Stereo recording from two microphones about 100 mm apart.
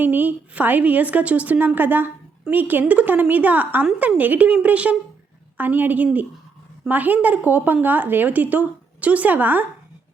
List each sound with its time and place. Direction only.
0.0 s a woman's voice: 15° right (ahead or behind)